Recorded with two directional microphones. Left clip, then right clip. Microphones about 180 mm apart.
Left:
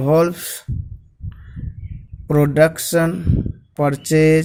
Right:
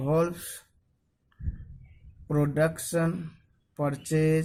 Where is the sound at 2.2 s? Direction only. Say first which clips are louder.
Left 12 dB; 30° left (ahead or behind).